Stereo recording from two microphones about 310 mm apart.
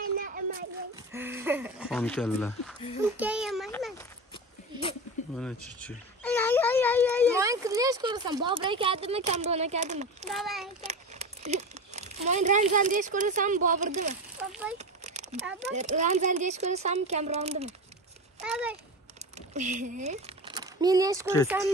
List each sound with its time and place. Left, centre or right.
0.0 s a sound: right
1.1 s speech: centre
3.0 s a sound: centre
5.3 s a sound: centre
7.3 s speech: centre
10.3 s a child's voice: centre
10.8 s speech: right
14.5 s speech: centre
14.8 s a sound: right
15.7 s speech: right
18.4 s a child's voice: centre
19.3 s speech: right